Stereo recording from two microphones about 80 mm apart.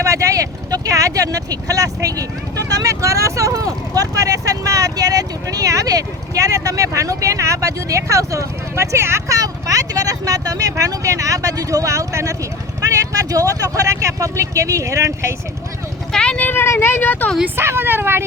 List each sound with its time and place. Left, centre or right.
0.0 s speech: right
16.1 s a sound: centre
16.4 s speech: left
17.6 s speech: right